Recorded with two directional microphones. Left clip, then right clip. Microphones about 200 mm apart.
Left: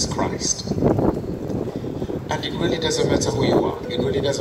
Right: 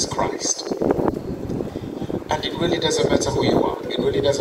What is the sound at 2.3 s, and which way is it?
Speech, 20° left (ahead or behind).